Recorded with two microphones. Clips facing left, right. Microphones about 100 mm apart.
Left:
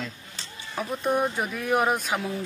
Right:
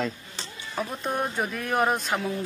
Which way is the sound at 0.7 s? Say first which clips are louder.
Left 3 dB; 5° left (ahead or behind).